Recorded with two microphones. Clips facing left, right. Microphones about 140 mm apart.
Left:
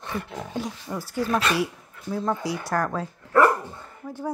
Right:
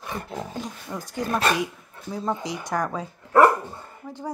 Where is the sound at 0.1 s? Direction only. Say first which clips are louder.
Left 1 dB; 35° right (ahead or behind).